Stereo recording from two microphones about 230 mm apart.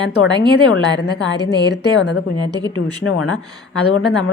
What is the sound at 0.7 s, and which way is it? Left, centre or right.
Speech, left.